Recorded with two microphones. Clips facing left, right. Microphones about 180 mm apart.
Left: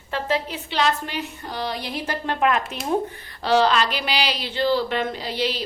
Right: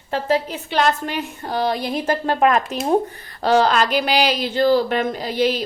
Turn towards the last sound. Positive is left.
turn(degrees=-45)  # may be behind; listen again after turning